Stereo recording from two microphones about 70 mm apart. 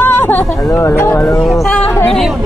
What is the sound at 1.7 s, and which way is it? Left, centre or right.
Speech, left.